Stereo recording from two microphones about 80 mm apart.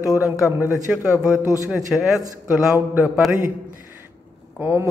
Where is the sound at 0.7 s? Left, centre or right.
Centre.